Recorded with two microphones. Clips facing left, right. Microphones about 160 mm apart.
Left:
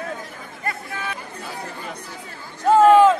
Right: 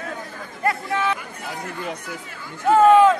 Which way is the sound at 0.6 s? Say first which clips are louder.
Right 8 dB; 70° right (ahead or behind).